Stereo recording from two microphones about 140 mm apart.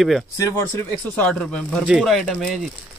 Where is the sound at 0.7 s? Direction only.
10° left (ahead or behind).